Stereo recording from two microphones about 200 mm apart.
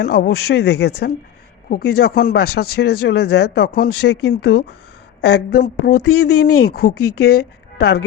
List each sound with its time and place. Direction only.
0.0 s a woman's voice: 50° left (ahead or behind)